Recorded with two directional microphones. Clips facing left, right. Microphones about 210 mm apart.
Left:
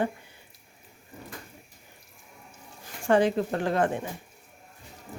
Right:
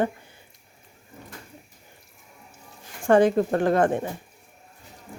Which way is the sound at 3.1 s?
50° right (ahead or behind).